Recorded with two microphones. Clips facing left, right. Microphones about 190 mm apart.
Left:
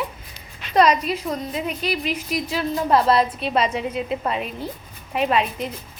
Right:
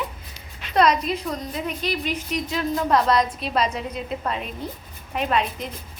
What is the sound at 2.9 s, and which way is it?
Speech, 30° left (ahead or behind).